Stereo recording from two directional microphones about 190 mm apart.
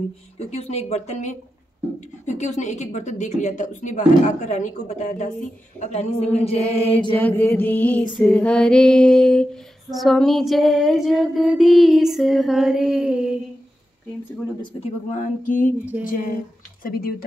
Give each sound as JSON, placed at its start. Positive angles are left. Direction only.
{"t": 0.4, "sound": "a woman's voice", "side_deg": 35}
{"t": 7.2, "sound": "music", "side_deg": 10}
{"t": 8.2, "sound": "female singing", "side_deg": 5}
{"t": 15.1, "sound": "a sound", "side_deg": 45}